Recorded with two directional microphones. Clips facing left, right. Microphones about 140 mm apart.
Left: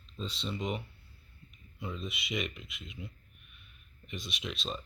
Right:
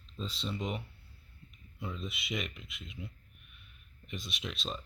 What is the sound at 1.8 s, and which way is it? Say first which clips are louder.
Speech: left 1 dB; centre (ahead or behind).